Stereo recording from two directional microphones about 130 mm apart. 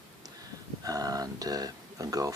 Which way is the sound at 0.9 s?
30° right (ahead or behind).